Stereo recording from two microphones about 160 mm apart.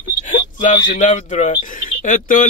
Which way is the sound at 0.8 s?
50° left (ahead or behind).